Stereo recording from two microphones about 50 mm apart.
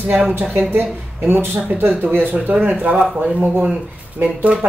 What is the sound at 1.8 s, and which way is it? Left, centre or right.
Speech, right.